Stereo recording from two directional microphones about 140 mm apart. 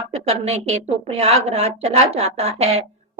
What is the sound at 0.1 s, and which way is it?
A woman's voice, 45° right (ahead or behind).